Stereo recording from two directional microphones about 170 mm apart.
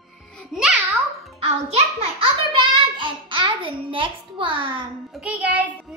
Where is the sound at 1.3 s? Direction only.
35° right (ahead or behind).